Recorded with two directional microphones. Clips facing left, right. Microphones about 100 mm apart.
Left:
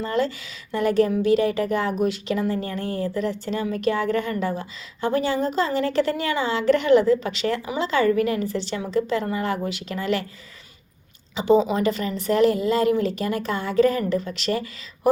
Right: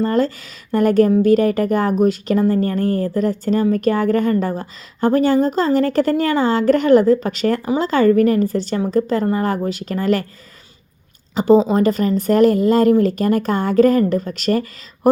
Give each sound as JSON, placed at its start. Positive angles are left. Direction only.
{"t": 0.0, "sound": "speech", "side_deg": -45}
{"t": 11.3, "sound": "speech", "side_deg": -40}